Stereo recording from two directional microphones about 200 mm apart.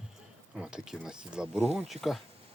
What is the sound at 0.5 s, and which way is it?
Speech, 5° right (ahead or behind).